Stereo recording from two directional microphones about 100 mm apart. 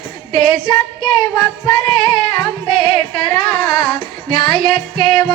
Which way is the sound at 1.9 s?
55° left (ahead or behind).